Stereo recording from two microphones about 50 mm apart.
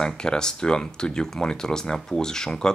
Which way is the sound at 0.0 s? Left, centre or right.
Centre.